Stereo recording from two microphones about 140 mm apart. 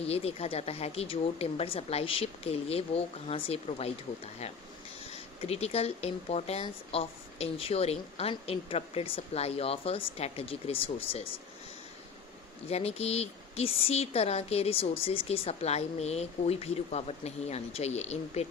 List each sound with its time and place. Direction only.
0.0 s speech: 45° left (ahead or behind)
5.4 s speech: 50° left (ahead or behind)
12.6 s speech: 50° left (ahead or behind)